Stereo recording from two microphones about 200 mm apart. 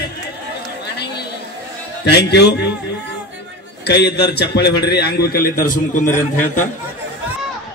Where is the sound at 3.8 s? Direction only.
55° left (ahead or behind).